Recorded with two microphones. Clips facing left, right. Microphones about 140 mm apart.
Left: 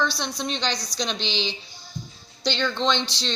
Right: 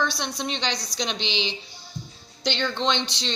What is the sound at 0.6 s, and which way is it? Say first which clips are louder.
Speech: left 1 dB; 60° right (ahead or behind).